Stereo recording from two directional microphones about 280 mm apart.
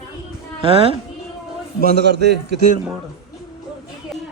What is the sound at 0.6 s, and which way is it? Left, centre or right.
Speech, centre.